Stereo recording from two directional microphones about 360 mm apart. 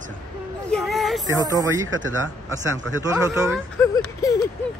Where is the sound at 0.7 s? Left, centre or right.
Centre.